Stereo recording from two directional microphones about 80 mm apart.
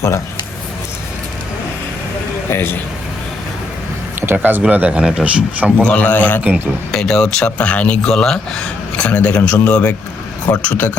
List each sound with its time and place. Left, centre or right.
2.5 s a man's voice: left
4.3 s speech: right
5.8 s a man's voice: centre
6.9 s a man's voice: centre; by 10.9 s left